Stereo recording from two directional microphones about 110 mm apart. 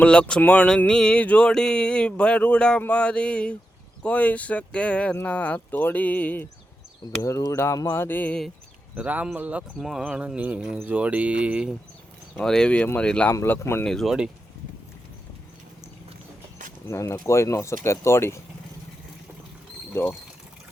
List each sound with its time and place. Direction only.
0.0 s a sound: 10° left (ahead or behind)
7.2 s speech: 30° left (ahead or behind); by 8.4 s 15° left (ahead or behind)
9.0 s speech: 15° right (ahead or behind)
12.4 s a sound: 5° left (ahead or behind)
13.3 s speech: 25° left (ahead or behind)
13.8 s speech: centre (ahead or behind)
16.9 s speech: 25° left (ahead or behind)
19.9 s speech: 20° left (ahead or behind)